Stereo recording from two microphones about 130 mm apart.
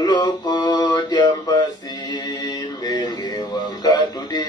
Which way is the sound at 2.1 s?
35° left (ahead or behind).